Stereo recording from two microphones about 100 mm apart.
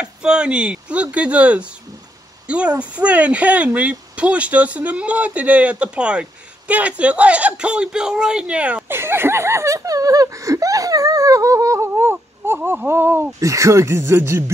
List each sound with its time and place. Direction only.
0.0 s speech: 10° right (ahead or behind); by 14.4 s 25° right (ahead or behind)